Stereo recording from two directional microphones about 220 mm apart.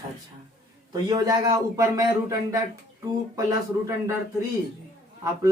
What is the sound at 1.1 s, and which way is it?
Speech, 15° right (ahead or behind).